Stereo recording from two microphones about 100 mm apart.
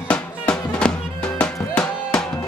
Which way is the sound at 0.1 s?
10° left (ahead or behind).